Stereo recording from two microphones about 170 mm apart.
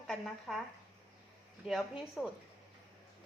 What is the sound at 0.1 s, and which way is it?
Speech, centre (ahead or behind).